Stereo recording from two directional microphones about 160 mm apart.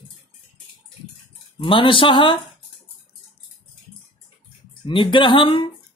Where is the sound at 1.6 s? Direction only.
30° left (ahead or behind).